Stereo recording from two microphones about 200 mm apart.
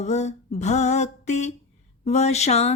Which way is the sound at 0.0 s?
35° left (ahead or behind).